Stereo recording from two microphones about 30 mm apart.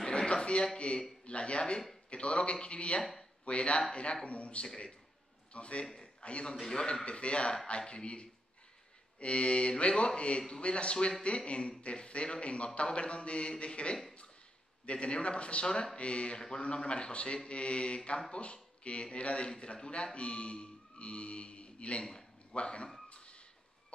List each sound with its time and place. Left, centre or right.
0.0 s a sound: left
1.2 s speech: left
6.6 s a man's voice: left
7.1 s speech: left
16.3 s a man's voice: left
16.6 s speech: left
23.0 s a sound: left